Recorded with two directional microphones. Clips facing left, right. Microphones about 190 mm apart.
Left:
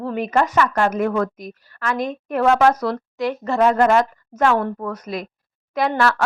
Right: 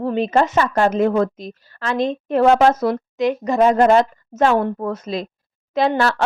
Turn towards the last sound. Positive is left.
turn(degrees=-25)  # may be behind; listen again after turning